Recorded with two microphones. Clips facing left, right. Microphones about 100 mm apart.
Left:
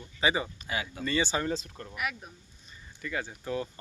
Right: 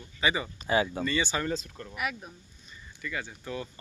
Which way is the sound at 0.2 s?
30° left (ahead or behind).